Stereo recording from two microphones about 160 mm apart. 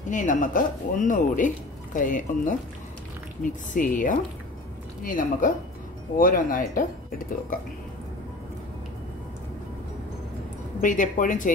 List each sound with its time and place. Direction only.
0.1 s speech: 50° left (ahead or behind)
3.7 s speech: 55° left (ahead or behind)
10.8 s speech: 55° left (ahead or behind)